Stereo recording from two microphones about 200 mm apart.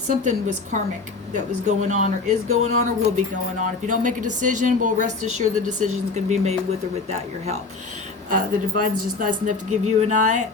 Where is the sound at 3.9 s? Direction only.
40° right (ahead or behind).